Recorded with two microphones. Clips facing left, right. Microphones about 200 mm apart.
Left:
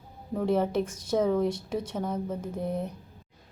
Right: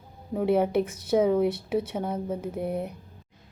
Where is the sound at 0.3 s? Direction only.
10° right (ahead or behind).